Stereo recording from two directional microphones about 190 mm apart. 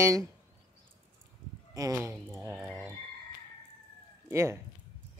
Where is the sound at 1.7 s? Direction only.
15° right (ahead or behind).